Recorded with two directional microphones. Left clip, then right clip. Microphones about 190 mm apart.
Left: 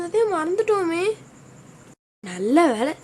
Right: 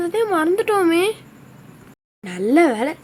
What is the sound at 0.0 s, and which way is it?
A woman's voice, 5° right (ahead or behind).